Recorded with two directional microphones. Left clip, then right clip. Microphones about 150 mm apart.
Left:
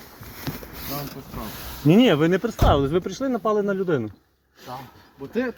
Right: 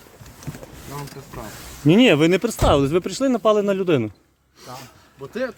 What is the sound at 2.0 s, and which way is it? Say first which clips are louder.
Speech: right 5 dB; 65° right (ahead or behind).